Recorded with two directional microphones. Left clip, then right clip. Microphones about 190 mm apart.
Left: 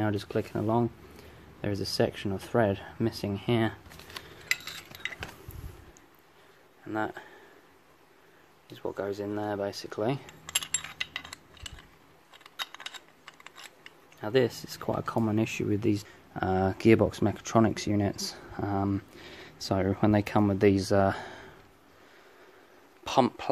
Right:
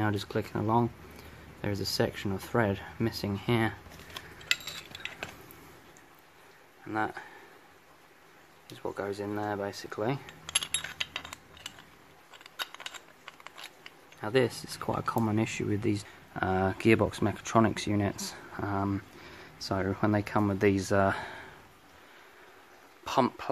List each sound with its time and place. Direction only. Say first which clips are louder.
0.0 s speech: left 1 dB; 5° left (ahead or behind)
6.9 s speech: even; 5° left (ahead or behind)
8.9 s speech: left 1 dB; 5° left (ahead or behind)
14.2 s speech: left 1 dB; 5° left (ahead or behind)
23.0 s speech: left 2 dB; 20° left (ahead or behind)